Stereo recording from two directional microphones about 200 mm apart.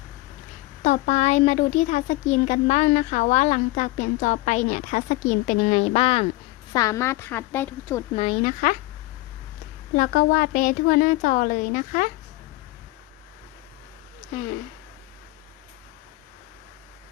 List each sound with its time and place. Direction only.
0.8 s speech: 40° left (ahead or behind)
6.7 s a woman's voice: 15° left (ahead or behind)
8.1 s speech: 30° left (ahead or behind)
9.9 s a woman's voice: 45° left (ahead or behind)